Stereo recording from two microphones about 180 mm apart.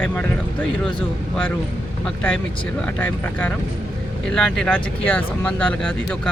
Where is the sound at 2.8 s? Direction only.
10° left (ahead or behind).